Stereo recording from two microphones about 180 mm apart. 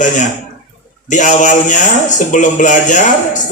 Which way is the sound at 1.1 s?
45° left (ahead or behind).